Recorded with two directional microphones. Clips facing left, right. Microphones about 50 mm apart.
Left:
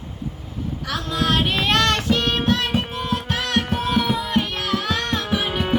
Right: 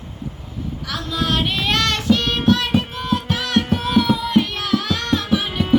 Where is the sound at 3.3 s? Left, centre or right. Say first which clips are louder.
Right 1 dB; left.